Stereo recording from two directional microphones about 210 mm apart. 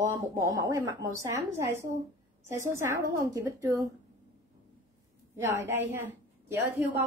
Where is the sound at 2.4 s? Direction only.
15° right (ahead or behind).